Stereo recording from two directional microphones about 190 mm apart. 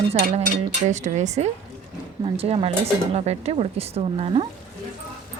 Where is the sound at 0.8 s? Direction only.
40° right (ahead or behind).